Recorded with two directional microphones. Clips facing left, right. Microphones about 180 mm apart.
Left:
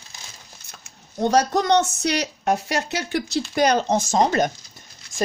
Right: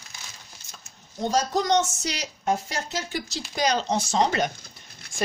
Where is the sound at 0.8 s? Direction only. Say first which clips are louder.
Left 6 dB; 65° left (ahead or behind).